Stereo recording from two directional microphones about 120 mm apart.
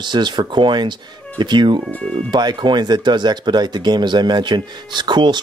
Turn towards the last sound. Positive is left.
turn(degrees=-40)  # may be behind; listen again after turning